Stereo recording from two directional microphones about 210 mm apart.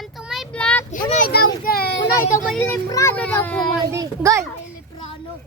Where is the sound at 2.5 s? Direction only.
5° left (ahead or behind).